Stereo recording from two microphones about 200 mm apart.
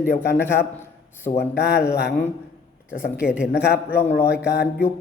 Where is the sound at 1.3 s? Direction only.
35° left (ahead or behind).